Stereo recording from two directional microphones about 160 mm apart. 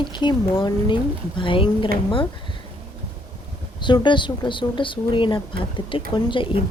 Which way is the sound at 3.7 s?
30° left (ahead or behind).